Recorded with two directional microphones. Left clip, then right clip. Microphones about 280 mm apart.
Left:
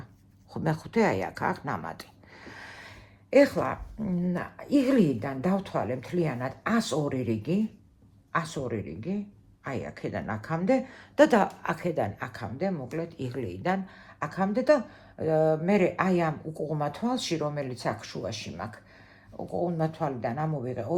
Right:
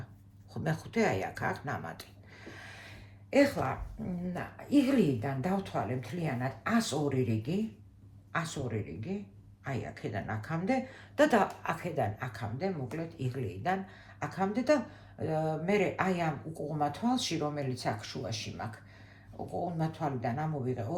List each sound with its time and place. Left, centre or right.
0.5 s speech: left
19.8 s speech: left